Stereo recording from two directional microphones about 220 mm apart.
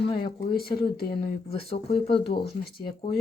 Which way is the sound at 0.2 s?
45° left (ahead or behind).